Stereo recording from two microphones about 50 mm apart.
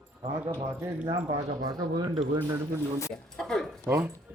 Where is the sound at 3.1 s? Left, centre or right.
Centre.